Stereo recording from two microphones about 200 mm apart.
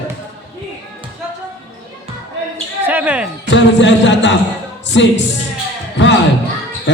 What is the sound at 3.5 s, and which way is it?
Speech, 65° left (ahead or behind).